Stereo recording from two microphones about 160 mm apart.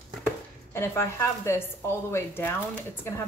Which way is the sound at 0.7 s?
15° left (ahead or behind).